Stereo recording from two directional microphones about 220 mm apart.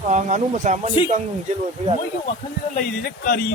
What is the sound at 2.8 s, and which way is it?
Speech, 40° left (ahead or behind).